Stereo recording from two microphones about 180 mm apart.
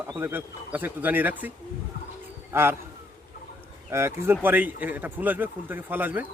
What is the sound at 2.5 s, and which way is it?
Speech, 15° right (ahead or behind).